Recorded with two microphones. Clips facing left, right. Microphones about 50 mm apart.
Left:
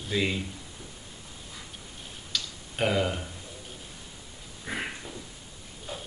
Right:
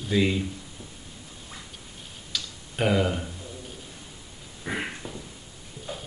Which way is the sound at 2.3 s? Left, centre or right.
Centre.